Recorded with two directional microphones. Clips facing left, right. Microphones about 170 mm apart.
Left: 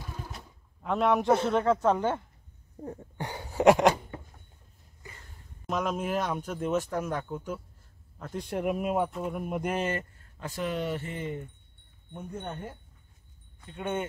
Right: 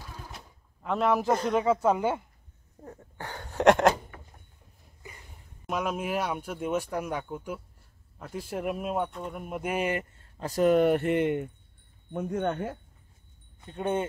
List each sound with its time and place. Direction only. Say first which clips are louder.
0.8 s speech: left 1 dB; centre (ahead or behind)
2.8 s a sound: left 4 dB; 20° left (ahead or behind); by 3.9 s centre (ahead or behind)
4.1 s a sound: left 7 dB; 25° left (ahead or behind)
5.7 s speech: even; 10° right (ahead or behind)
10.4 s speech: right 10 dB; 40° right (ahead or behind); by 11.5 s 75° right (ahead or behind)
12.1 s speech: right 9 dB; 90° right
13.7 s speech: right 3 dB; 35° right (ahead or behind)